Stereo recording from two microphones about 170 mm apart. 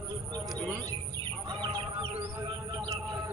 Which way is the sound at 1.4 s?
25° right (ahead or behind).